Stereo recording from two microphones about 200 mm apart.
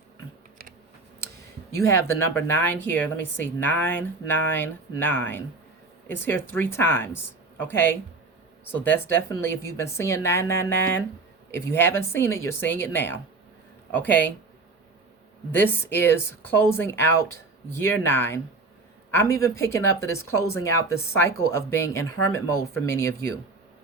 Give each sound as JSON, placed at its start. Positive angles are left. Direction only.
{"t": 0.6, "sound": "computer keyboard", "side_deg": -45}
{"t": 1.8, "sound": "speech", "side_deg": 15}
{"t": 15.5, "sound": "speech", "side_deg": 10}